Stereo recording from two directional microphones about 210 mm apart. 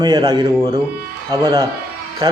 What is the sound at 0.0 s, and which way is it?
Speech, 20° right (ahead or behind).